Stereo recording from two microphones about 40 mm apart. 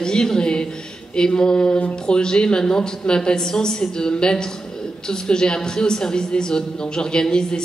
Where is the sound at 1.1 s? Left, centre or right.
Centre.